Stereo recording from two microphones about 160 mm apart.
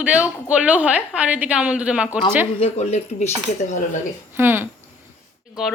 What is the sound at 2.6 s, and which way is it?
Cutlery, 40° left (ahead or behind).